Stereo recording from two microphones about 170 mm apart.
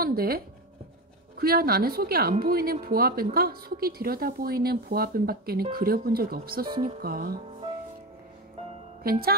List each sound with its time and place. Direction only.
0.0 s speech: 60° right (ahead or behind)
1.4 s speech: 60° right (ahead or behind)
9.0 s speech: 60° right (ahead or behind)